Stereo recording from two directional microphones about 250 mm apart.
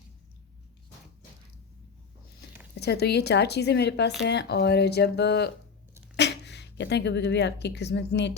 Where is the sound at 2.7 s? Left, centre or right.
Left.